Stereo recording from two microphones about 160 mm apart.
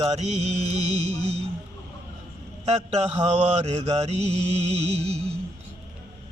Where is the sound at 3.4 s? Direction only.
40° right (ahead or behind).